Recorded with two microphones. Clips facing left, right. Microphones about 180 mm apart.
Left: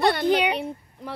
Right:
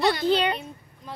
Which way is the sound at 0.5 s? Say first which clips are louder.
Left 6 dB; 70° left (ahead or behind).